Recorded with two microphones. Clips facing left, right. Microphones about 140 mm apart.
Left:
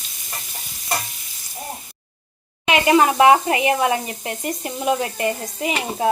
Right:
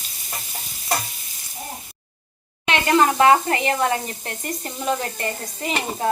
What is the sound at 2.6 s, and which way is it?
Speech, 10° left (ahead or behind).